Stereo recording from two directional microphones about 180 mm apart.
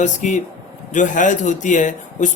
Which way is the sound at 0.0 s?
40° left (ahead or behind).